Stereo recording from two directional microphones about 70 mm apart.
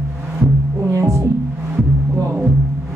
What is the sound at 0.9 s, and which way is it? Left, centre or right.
Music, right.